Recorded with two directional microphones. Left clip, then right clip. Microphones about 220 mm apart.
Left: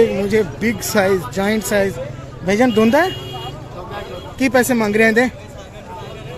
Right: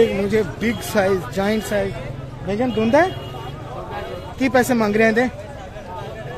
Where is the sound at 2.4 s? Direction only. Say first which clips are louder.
Left 7 dB; 25° left (ahead or behind).